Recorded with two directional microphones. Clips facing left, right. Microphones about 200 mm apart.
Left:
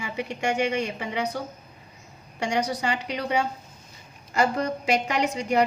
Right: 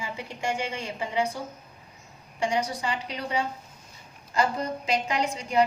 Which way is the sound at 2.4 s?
75° left (ahead or behind).